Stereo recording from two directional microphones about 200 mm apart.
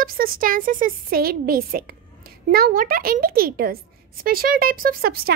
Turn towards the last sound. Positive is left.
turn(degrees=-50)  # may be behind; listen again after turning